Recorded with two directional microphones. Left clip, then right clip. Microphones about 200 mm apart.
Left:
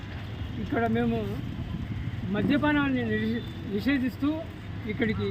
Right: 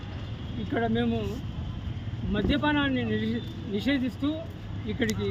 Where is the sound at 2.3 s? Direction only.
5° right (ahead or behind).